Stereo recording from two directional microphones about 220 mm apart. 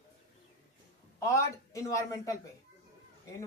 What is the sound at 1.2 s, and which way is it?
A man's voice, 15° left (ahead or behind).